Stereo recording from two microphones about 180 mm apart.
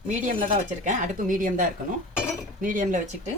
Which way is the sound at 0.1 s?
45° right (ahead or behind).